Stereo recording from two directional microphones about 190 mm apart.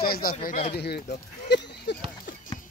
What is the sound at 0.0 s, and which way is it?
Speech, 50° left (ahead or behind).